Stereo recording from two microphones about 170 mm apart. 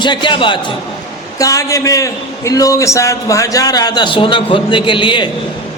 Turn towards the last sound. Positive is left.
turn(degrees=30)  # may be behind; listen again after turning